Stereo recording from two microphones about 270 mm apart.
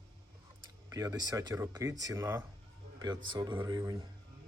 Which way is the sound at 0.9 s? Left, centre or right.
Centre.